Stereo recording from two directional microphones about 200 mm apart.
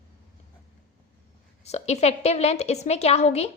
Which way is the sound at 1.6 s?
35° left (ahead or behind).